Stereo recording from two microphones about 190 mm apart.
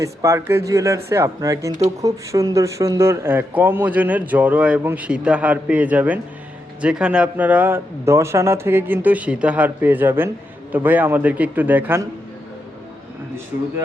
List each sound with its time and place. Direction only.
0.0 s speech: 15° right (ahead or behind)